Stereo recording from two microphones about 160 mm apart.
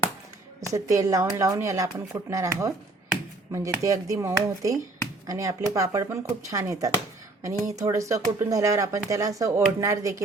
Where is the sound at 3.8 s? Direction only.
20° right (ahead or behind).